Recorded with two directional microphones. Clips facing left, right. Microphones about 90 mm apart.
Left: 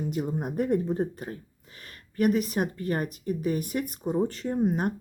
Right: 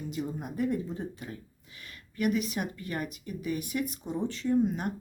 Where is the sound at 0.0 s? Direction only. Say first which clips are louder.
Left 5 dB; 50° left (ahead or behind).